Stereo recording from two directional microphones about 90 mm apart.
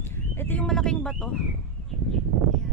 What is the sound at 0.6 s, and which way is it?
Speech, 5° left (ahead or behind).